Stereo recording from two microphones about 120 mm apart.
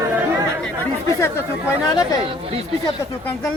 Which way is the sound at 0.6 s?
15° left (ahead or behind).